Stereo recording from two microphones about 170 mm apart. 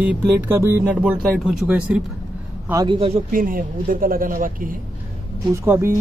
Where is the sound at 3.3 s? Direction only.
55° right (ahead or behind).